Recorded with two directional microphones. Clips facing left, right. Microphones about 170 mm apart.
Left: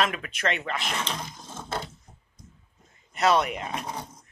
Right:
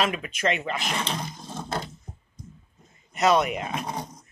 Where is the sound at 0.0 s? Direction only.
5° right (ahead or behind).